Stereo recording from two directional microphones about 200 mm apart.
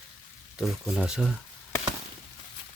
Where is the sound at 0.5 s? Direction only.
Centre (ahead or behind).